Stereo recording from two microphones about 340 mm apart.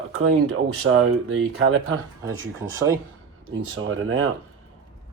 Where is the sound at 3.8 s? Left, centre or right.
Right.